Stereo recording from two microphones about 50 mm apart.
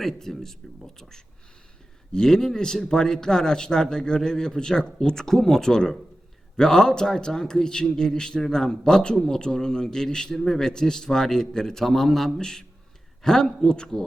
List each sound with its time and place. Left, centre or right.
0.0 s a man's voice: centre